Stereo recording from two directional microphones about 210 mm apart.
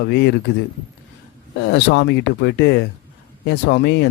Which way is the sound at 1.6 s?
55° left (ahead or behind).